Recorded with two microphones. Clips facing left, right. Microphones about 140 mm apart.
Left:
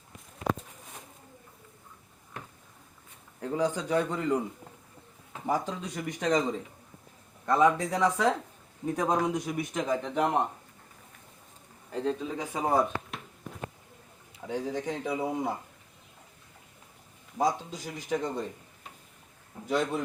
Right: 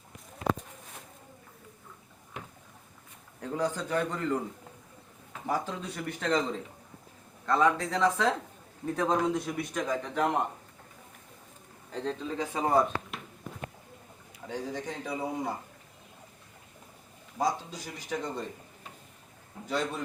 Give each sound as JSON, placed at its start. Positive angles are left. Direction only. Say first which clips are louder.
{"t": 3.4, "sound": "a man's voice", "louder": "left 2 dB", "side_deg": 10}
{"t": 5.5, "sound": "a man's voice", "louder": "left 2 dB", "side_deg": 15}
{"t": 11.9, "sound": "a man's voice", "louder": "left 3 dB", "side_deg": 5}
{"t": 14.4, "sound": "a man's voice", "louder": "left 4 dB", "side_deg": 15}
{"t": 15.1, "sound": "a man's voice", "louder": "left 2 dB", "side_deg": 5}
{"t": 17.3, "sound": "a man's voice", "louder": "left 2 dB", "side_deg": 20}
{"t": 19.6, "sound": "a man's voice", "louder": "left 3 dB", "side_deg": 15}